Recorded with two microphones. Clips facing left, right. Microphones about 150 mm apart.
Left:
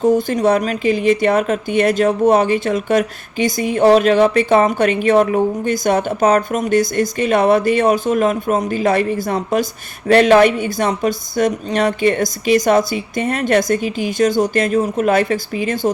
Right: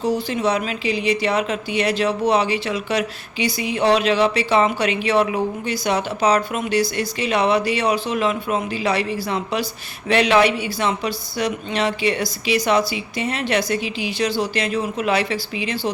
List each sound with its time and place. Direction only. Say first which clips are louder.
0.0 s speech: left 6 dB; 50° left (ahead or behind)